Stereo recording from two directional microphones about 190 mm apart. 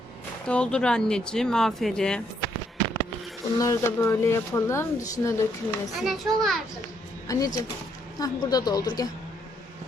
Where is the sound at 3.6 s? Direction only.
15° left (ahead or behind).